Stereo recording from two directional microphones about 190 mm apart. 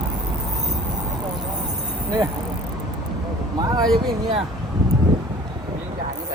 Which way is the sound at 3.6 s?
20° right (ahead or behind).